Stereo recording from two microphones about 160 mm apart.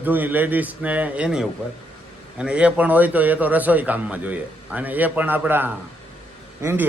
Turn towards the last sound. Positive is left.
turn(degrees=-15)  # may be behind; listen again after turning